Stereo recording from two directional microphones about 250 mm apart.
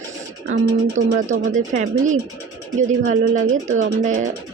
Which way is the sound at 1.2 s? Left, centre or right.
Right.